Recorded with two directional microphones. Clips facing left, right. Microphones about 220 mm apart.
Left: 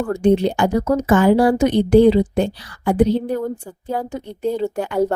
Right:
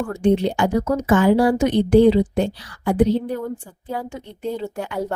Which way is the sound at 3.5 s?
40° left (ahead or behind).